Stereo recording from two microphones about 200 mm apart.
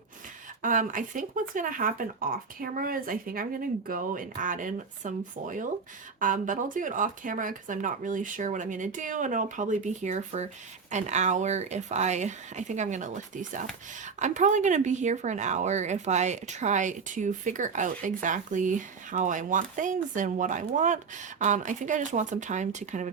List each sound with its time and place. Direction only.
0.6 s speech: 40° right (ahead or behind)